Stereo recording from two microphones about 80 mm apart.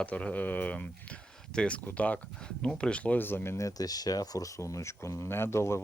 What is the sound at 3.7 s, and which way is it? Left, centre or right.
Speech, left.